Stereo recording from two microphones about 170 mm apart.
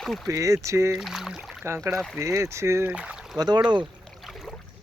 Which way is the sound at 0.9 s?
Centre (ahead or behind).